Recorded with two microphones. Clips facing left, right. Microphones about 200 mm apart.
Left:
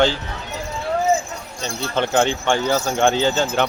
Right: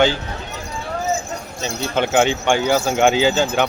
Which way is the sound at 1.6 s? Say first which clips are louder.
Right 1 dB; centre (ahead or behind).